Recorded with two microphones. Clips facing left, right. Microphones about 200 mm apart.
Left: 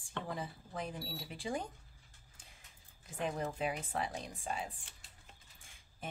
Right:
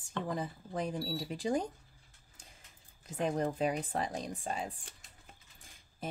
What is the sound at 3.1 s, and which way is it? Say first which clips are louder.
Speech: right 5 dB; 40° right (ahead or behind).